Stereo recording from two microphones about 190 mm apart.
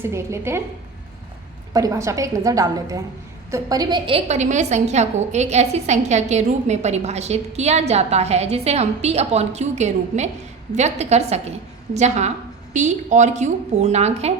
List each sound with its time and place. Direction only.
0.0 s a woman's voice: 15° right (ahead or behind)
1.7 s a woman's voice: 15° right (ahead or behind); by 14.3 s 35° right (ahead or behind)